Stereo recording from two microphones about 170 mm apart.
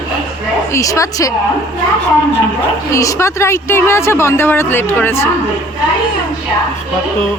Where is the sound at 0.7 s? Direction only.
20° left (ahead or behind).